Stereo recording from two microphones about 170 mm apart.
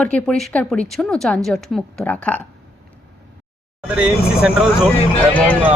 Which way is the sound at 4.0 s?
5° right (ahead or behind).